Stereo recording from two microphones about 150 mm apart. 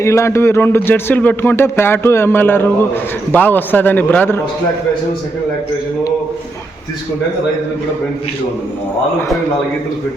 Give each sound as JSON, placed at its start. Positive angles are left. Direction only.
{"t": 0.0, "sound": "speech", "side_deg": 20}